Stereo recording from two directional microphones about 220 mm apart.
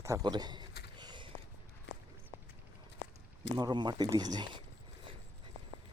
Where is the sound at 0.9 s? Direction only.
20° right (ahead or behind).